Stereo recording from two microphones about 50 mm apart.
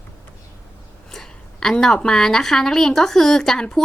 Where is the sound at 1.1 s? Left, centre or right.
Centre.